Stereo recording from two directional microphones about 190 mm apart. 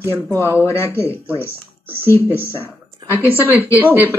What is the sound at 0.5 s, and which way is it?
Speech, 10° left (ahead or behind).